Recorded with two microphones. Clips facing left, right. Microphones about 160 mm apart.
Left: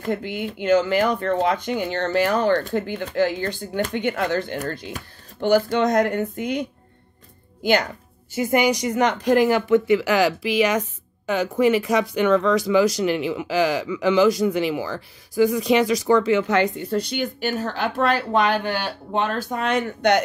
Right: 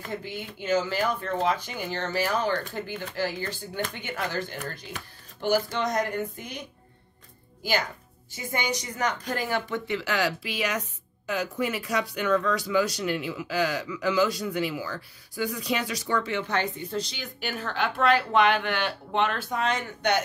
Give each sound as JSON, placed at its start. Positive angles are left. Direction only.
{"t": 0.1, "sound": "speech", "side_deg": 65}
{"t": 2.3, "sound": "speech", "side_deg": 45}
{"t": 2.7, "sound": "speech", "side_deg": 60}
{"t": 8.4, "sound": "speech", "side_deg": 80}